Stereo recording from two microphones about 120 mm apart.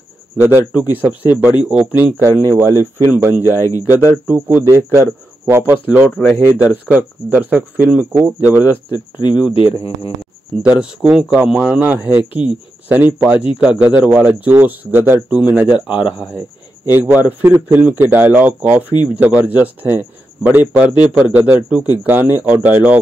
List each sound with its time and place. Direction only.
0.4 s speech: 15° right (ahead or behind)
2.1 s speech: 20° right (ahead or behind)
3.5 s speech: 25° left (ahead or behind)
3.9 s speech: 15° right (ahead or behind)
6.0 s speech: centre (ahead or behind)
6.4 s speech: 15° right (ahead or behind)
8.9 s speech: 40° left (ahead or behind)
9.5 s speech: 50° left (ahead or behind)
10.6 s speech: 10° right (ahead or behind)
16.9 s speech: 15° right (ahead or behind)